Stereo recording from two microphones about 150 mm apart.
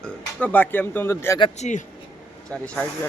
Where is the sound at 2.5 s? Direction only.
10° left (ahead or behind).